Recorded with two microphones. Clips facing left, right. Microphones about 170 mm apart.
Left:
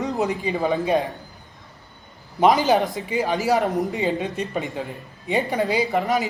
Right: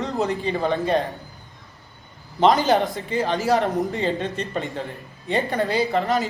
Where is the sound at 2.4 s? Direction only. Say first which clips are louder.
Even; centre (ahead or behind).